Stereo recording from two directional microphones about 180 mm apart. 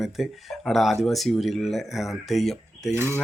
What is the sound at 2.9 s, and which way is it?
Speech, 15° right (ahead or behind).